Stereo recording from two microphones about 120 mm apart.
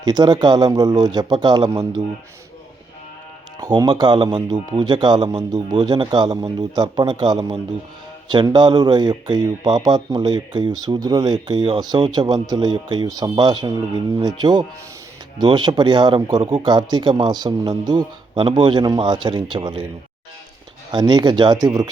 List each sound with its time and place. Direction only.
0.0 s speech: 35° right (ahead or behind)
3.8 s speech: 40° right (ahead or behind)
16.4 s speech: 50° right (ahead or behind)
20.9 s speech: 35° right (ahead or behind)